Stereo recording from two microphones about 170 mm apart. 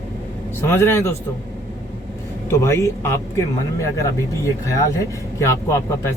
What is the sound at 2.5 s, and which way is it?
Speech, 15° left (ahead or behind).